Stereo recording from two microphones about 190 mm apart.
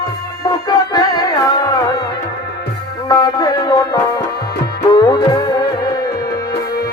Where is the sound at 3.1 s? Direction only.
20° left (ahead or behind).